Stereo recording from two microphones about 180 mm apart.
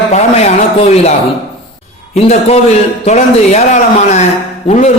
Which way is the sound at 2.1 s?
35° left (ahead or behind).